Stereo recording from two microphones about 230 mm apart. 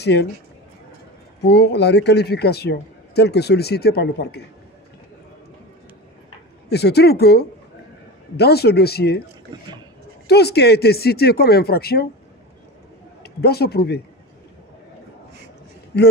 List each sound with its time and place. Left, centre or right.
0.0 s a man's voice: left
1.5 s a man's voice: left
6.7 s a man's voice: left
10.2 s a man's voice: left
13.2 s speech: left
15.9 s a man's voice: left